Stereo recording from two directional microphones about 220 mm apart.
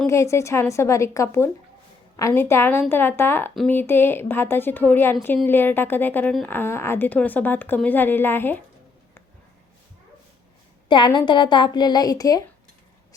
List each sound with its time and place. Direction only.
0.1 s a woman's voice: 15° left (ahead or behind)
10.8 s a woman's voice: 20° left (ahead or behind)